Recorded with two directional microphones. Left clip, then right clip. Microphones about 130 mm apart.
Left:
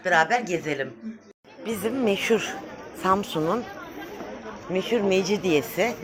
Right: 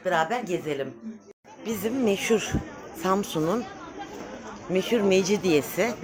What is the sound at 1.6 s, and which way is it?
Speech, 15° right (ahead or behind).